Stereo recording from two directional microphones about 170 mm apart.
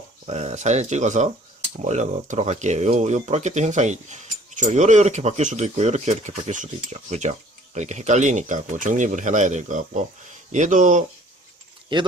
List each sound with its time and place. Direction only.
0.3 s speech: 40° right (ahead or behind)
11.9 s speech: 30° right (ahead or behind)